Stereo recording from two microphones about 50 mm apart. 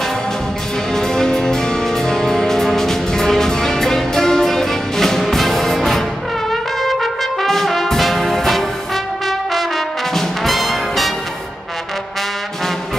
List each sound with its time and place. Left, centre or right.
0.9 s music: centre
6.5 s brass instrument: centre
10.1 s brass instrument: centre